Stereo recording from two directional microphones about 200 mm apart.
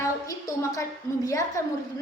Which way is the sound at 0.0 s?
15° left (ahead or behind).